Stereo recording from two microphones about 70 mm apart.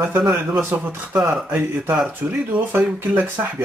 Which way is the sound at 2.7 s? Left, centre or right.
Right.